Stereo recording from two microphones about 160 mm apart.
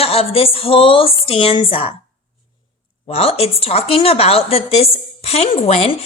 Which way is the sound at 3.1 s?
40° left (ahead or behind).